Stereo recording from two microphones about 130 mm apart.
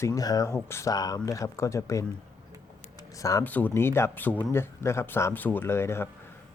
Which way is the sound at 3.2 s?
25° left (ahead or behind).